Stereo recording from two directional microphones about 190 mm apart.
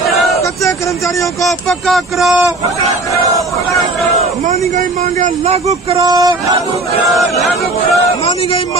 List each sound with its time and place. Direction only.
0.1 s a sound: centre (ahead or behind)
1.4 s speech: centre (ahead or behind)
4.2 s speech: 35° right (ahead or behind); by 6.3 s 20° right (ahead or behind)
7.2 s speech: centre (ahead or behind)